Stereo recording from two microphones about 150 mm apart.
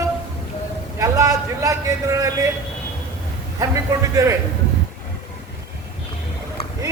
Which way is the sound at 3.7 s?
20° right (ahead or behind).